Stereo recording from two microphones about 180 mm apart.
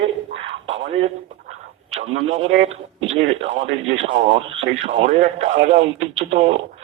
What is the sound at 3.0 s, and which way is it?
Radio, 90° right.